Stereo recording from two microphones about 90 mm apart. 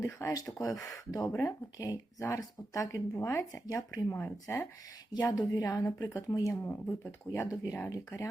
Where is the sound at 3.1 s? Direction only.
30° left (ahead or behind).